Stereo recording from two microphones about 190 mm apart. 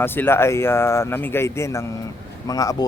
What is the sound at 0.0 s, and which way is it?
Speech, 10° left (ahead or behind).